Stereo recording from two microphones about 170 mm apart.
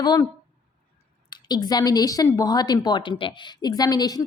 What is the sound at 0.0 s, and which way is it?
Speech, 25° left (ahead or behind).